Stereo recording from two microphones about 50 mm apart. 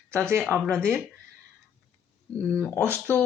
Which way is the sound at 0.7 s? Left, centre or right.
Centre.